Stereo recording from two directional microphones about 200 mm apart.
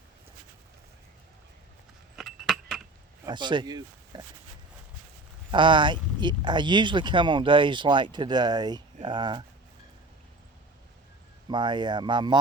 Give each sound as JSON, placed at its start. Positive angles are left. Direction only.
{"t": 2.1, "sound": "keys jangling", "side_deg": 0}
{"t": 3.2, "sound": "speech", "side_deg": -20}
{"t": 5.5, "sound": "speech", "side_deg": -25}
{"t": 11.4, "sound": "speech", "side_deg": -20}